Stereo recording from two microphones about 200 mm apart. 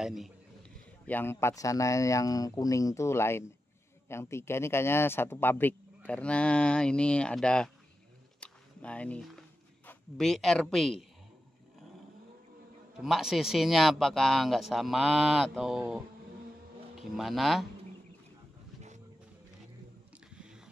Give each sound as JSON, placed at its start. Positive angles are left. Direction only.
{"t": 0.0, "sound": "a man's voice", "side_deg": 0}
{"t": 1.0, "sound": "speech", "side_deg": 10}
{"t": 8.4, "sound": "a sound", "side_deg": 5}
{"t": 9.8, "sound": "a woman's voice", "side_deg": 0}
{"t": 13.0, "sound": "speech", "side_deg": 0}
{"t": 17.2, "sound": "speech", "side_deg": 0}
{"t": 20.3, "sound": "a sound", "side_deg": -5}